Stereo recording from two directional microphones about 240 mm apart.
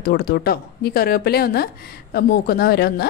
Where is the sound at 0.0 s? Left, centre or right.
Left.